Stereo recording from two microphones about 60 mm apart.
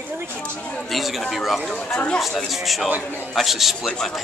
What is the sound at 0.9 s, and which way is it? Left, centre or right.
Speech, centre.